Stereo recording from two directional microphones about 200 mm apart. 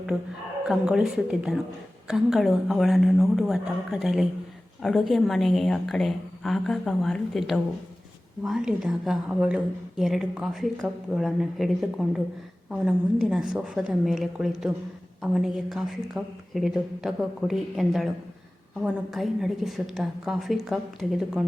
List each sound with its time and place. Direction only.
0.7 s a woman's voice: 5° right (ahead or behind)